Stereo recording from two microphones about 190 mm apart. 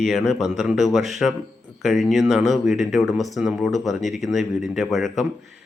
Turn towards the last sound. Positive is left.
turn(degrees=0)  # may be behind; listen again after turning